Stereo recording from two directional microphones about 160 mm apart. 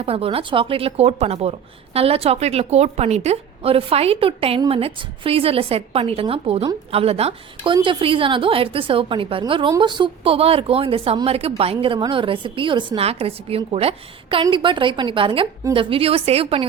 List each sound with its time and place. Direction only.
0.0 s a woman's voice: 35° right (ahead or behind)